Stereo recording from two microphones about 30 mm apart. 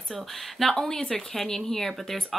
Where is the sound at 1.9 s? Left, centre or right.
Centre.